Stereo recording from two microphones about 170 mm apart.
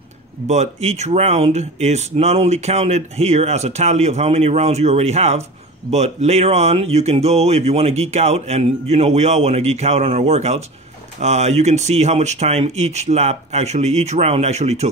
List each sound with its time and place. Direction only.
0.5 s speech: 40° right (ahead or behind)